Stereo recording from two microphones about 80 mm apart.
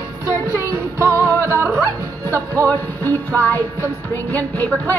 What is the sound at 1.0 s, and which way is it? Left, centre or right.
Music, left.